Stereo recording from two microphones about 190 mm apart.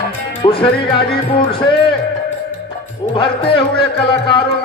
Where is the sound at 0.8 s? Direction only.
25° left (ahead or behind).